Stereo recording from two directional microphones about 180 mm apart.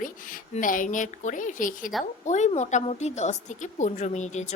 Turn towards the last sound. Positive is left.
turn(degrees=40)  # may be behind; listen again after turning